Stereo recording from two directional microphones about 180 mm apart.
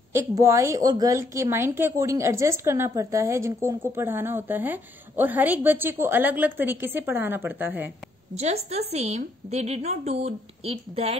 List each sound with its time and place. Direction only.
0.1 s a woman's voice: 15° right (ahead or behind)
8.4 s a woman's voice: 35° right (ahead or behind)